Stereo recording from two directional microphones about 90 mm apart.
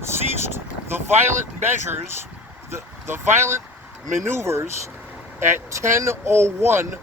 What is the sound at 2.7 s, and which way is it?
Speech, 30° right (ahead or behind).